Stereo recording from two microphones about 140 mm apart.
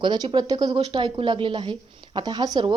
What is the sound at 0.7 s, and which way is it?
Speech, 40° right (ahead or behind).